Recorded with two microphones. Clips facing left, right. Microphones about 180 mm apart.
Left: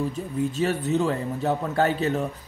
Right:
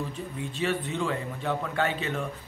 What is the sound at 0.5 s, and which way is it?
A man's voice, 40° left (ahead or behind).